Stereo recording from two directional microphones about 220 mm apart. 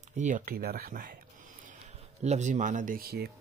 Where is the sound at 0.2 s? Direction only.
40° right (ahead or behind).